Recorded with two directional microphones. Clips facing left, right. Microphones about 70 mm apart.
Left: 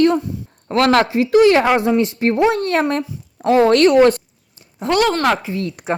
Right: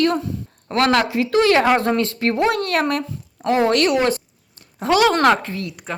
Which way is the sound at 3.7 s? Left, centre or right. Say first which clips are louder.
Left 6 dB; left.